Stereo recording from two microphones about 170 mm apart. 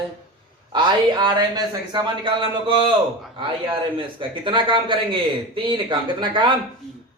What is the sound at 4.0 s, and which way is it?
A man's voice, 30° right (ahead or behind).